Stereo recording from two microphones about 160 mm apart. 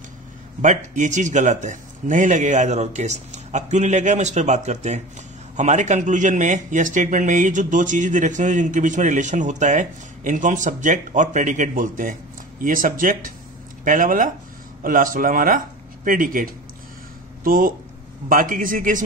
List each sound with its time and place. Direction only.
0.6 s speech: 50° right (ahead or behind)